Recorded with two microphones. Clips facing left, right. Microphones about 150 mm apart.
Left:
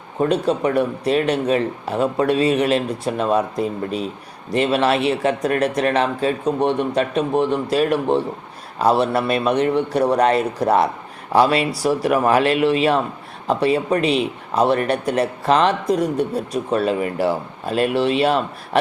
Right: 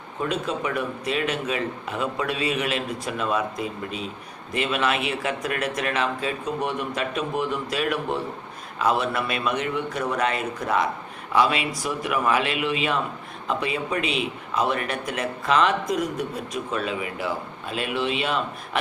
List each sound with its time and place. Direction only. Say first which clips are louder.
0.2 s a man's voice: left 8 dB; 35° left (ahead or behind)